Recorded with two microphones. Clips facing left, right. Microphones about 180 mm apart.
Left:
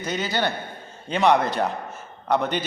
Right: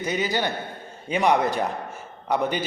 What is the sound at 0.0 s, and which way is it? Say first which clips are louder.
A man's voice: even; 15° right (ahead or behind).